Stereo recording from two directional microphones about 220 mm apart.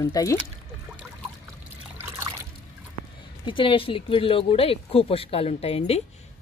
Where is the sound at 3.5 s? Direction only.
25° left (ahead or behind).